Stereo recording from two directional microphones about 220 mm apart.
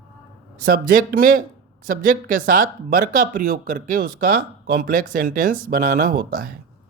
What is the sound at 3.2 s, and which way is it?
Speech, 40° right (ahead or behind).